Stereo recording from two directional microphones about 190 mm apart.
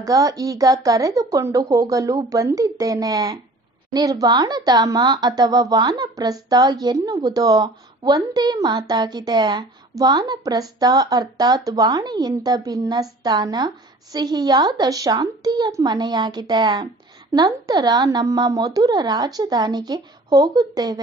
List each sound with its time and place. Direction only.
0.0 s a woman's voice: 20° right (ahead or behind)